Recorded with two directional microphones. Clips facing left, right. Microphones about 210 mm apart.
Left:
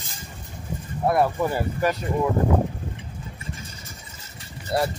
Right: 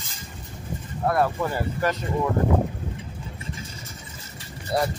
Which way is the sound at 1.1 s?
15° left (ahead or behind).